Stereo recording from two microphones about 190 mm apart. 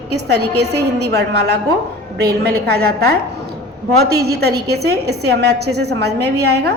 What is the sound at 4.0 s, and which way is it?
A woman's voice, 60° right (ahead or behind).